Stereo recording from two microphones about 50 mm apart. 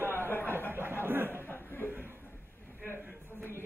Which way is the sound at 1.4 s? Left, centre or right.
Left.